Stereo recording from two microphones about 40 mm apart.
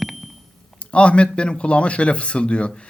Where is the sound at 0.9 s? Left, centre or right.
Left.